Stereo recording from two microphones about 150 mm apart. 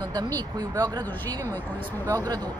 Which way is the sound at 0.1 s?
25° right (ahead or behind).